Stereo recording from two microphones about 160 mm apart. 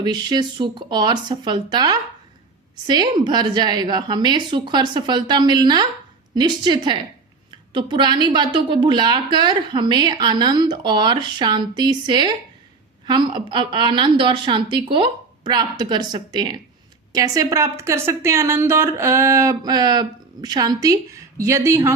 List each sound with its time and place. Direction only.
0.0 s a woman's voice: 25° right (ahead or behind)